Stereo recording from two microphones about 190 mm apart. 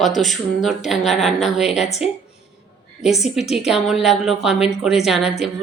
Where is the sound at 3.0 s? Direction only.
Centre (ahead or behind).